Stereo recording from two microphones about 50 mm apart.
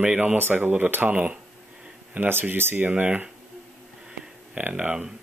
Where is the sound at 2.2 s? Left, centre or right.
Right.